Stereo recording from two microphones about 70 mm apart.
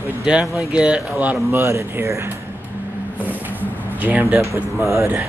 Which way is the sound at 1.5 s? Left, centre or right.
Right.